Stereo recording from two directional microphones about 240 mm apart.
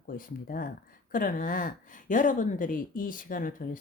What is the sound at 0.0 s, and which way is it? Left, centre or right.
Speech, left.